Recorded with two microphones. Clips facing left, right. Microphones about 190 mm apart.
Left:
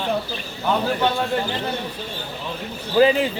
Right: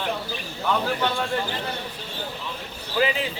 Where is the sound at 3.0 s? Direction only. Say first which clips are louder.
Left 8 dB; 40° left (ahead or behind).